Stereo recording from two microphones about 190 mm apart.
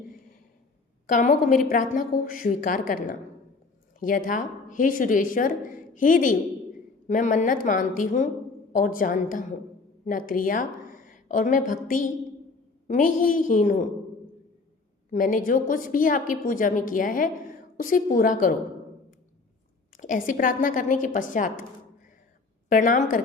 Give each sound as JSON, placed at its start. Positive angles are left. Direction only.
{"t": 1.0, "sound": "a woman's voice", "side_deg": 45}
{"t": 15.1, "sound": "a woman's voice", "side_deg": 45}
{"t": 20.0, "sound": "a woman's voice", "side_deg": 45}
{"t": 22.7, "sound": "a woman's voice", "side_deg": 45}